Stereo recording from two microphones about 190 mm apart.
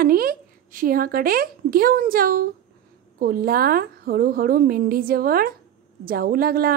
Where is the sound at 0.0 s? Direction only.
50° right (ahead or behind).